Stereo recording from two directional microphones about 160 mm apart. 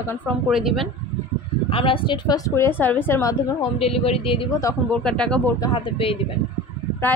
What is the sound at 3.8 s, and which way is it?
Speech, 40° left (ahead or behind).